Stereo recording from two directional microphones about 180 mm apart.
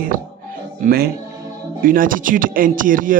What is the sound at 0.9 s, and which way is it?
A man's voice, 60° right (ahead or behind).